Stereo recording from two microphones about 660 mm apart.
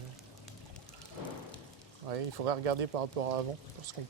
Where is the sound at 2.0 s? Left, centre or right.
Right.